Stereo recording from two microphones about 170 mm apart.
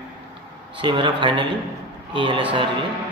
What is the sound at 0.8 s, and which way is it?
A man's voice, 30° right (ahead or behind).